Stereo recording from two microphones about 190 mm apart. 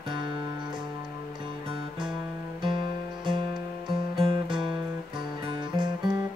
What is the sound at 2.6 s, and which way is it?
Music, 25° right (ahead or behind).